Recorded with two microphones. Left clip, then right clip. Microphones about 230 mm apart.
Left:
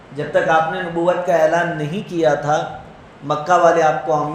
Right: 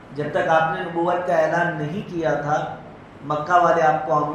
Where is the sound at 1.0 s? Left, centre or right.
Left.